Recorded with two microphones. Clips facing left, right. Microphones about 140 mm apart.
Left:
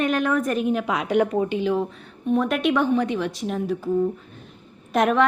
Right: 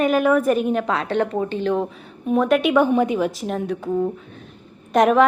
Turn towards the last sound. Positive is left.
turn(degrees=0)  # may be behind; listen again after turning